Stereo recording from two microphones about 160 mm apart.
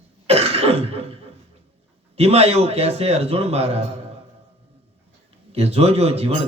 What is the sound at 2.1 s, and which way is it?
A man's voice, 40° right (ahead or behind).